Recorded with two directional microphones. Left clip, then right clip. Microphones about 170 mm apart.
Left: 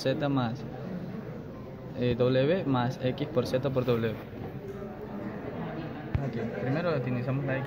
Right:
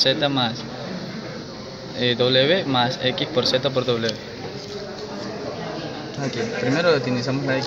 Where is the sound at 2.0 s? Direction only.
5° left (ahead or behind).